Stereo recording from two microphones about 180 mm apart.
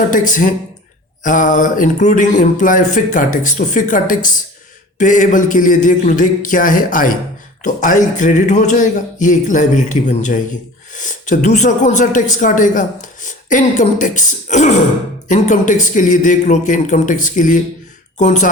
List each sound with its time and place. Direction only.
0.1 s speech: 45° left (ahead or behind)